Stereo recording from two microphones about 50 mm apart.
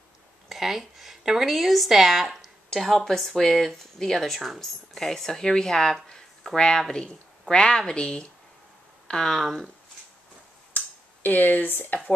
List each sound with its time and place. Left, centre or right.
0.5 s a woman's voice: centre
2.7 s a woman's voice: centre
11.2 s speech: left